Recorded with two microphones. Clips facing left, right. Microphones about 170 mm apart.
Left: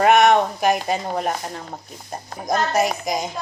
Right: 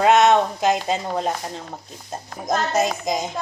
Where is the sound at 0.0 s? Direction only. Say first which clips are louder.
Left 1 dB; 20° right (ahead or behind).